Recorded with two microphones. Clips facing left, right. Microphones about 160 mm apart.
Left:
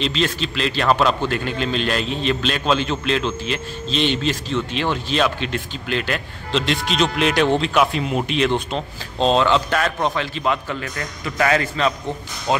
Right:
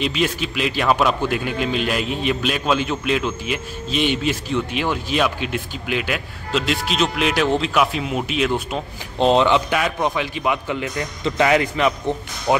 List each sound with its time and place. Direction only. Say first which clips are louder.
0.0 s a man's voice: even; 10° right (ahead or behind)